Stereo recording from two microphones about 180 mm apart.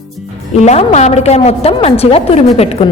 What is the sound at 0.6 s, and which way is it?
A woman's voice, 40° left (ahead or behind).